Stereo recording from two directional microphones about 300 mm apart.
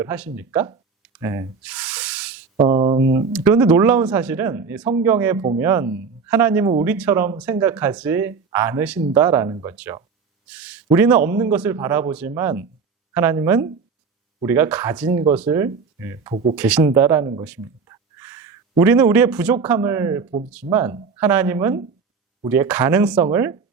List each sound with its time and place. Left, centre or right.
0.0 s rub: centre
2.6 s speech: centre
9.0 s speech: right
9.2 s speech: centre